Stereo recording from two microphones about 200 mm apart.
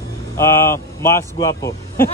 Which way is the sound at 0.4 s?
15° left (ahead or behind).